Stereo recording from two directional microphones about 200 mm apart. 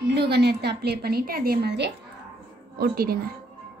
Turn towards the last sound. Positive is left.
turn(degrees=-50)  # may be behind; listen again after turning